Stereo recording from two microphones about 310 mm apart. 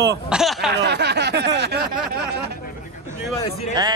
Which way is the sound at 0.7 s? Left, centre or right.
Right.